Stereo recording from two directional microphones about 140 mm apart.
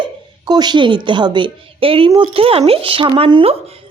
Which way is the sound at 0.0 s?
30° right (ahead or behind).